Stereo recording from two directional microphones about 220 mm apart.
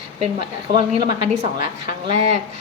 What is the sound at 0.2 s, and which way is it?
A woman's voice, 25° right (ahead or behind).